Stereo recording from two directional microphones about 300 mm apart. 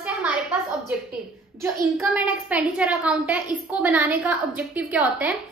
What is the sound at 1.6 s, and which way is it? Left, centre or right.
A woman's voice, centre.